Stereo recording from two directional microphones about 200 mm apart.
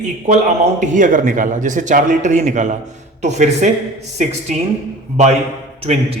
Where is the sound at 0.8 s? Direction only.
40° right (ahead or behind).